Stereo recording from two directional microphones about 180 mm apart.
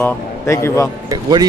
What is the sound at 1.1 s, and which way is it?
Speech, 20° right (ahead or behind).